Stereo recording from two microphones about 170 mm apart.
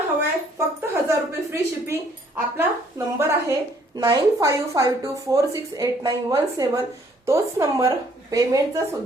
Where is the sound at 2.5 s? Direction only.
15° right (ahead or behind).